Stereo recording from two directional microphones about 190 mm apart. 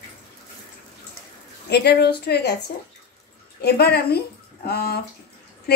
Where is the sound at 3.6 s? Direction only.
55° left (ahead or behind).